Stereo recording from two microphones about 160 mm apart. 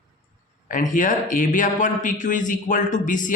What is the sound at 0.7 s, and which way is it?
Speech, 55° left (ahead or behind).